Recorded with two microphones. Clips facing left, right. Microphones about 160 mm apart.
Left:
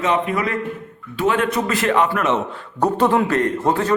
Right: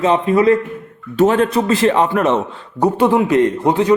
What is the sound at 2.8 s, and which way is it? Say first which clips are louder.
A man's voice: right 3 dB; 10° right (ahead or behind).